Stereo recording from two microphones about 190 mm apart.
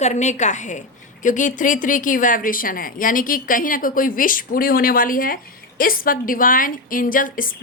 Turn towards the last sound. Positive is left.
turn(degrees=45)  # may be behind; listen again after turning